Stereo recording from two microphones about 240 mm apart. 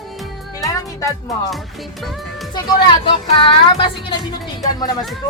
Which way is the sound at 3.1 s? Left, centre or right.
Left.